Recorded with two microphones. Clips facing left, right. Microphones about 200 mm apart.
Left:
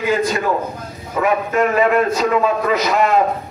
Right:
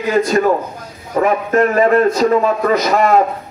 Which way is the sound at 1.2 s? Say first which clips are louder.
Right 3 dB; 40° right (ahead or behind).